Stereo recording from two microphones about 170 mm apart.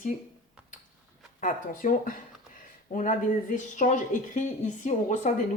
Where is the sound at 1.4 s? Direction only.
50° left (ahead or behind).